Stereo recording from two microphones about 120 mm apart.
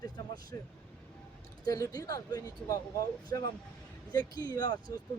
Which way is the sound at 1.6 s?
30° left (ahead or behind).